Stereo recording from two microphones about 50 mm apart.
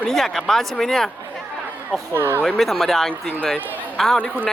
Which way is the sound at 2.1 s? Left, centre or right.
Right.